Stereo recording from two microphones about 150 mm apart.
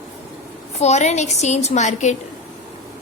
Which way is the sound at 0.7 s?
50° left (ahead or behind).